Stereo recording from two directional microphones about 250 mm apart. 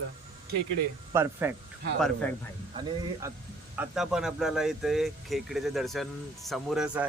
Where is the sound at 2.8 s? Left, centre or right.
Centre.